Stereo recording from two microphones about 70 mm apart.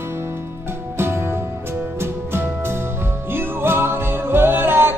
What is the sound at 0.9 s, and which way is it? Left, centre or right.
Music, right.